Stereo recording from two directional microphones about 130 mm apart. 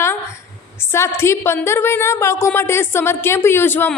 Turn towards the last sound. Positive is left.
turn(degrees=15)  # may be behind; listen again after turning